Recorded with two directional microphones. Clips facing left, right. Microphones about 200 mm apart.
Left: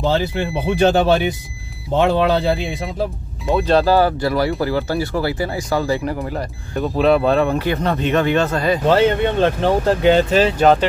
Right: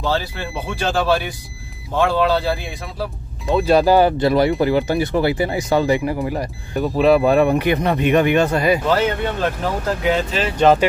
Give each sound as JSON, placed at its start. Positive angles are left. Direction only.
{"t": 0.0, "sound": "speech", "side_deg": 20}
{"t": 3.5, "sound": "speech", "side_deg": -10}
{"t": 8.8, "sound": "speech", "side_deg": 25}
{"t": 10.6, "sound": "speech", "side_deg": 0}